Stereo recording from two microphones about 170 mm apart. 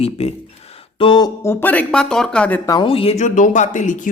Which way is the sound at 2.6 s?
20° left (ahead or behind).